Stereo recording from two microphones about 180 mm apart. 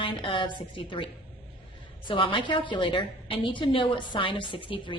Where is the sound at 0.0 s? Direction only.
30° left (ahead or behind).